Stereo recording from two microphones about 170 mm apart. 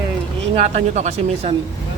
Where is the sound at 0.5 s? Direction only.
40° right (ahead or behind).